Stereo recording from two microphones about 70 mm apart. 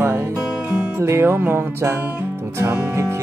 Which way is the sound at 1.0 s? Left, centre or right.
Right.